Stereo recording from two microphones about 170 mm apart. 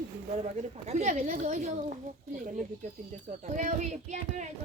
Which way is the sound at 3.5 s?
45° right (ahead or behind).